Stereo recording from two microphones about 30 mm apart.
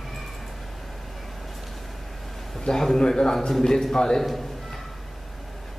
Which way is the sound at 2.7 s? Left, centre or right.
Centre.